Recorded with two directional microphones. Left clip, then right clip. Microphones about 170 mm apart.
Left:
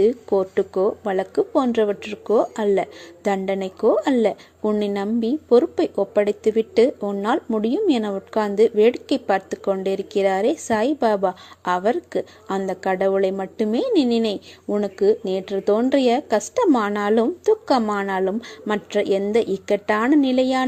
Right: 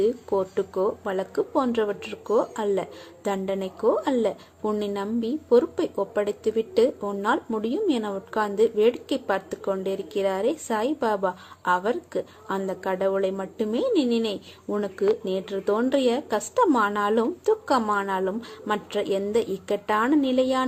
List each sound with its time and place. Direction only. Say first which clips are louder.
0.0 s a woman's voice: left 5 dB; 35° left (ahead or behind)